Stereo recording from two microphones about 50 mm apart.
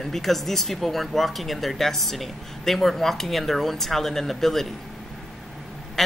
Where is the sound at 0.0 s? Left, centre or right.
Centre.